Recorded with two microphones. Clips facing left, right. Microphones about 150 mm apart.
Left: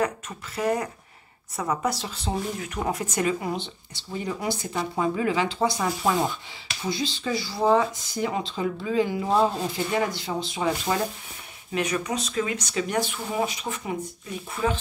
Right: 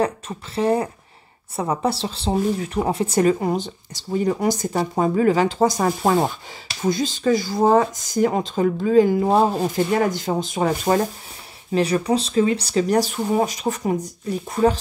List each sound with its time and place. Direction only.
0.0 s speech: 30° right (ahead or behind); by 11.0 s 45° right (ahead or behind)
11.7 s speech: 35° right (ahead or behind)